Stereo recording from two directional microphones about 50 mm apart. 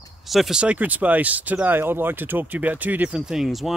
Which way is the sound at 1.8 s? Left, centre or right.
Right.